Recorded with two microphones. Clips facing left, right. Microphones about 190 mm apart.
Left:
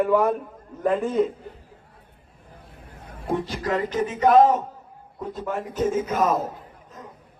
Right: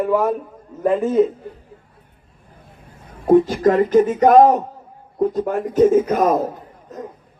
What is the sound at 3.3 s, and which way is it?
Speech, 50° right (ahead or behind).